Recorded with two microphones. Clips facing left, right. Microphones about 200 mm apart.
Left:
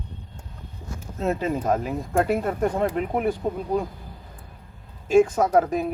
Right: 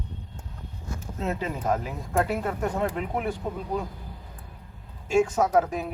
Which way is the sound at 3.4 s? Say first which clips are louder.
Left 5 dB; 35° left (ahead or behind).